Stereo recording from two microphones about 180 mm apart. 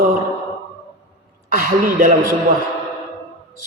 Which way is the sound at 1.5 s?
50° right (ahead or behind).